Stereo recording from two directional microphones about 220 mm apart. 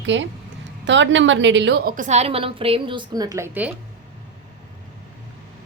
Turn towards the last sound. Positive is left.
turn(degrees=-10)  # may be behind; listen again after turning